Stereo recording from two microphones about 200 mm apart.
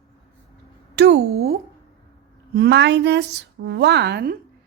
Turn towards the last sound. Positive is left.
turn(degrees=-50)  # may be behind; listen again after turning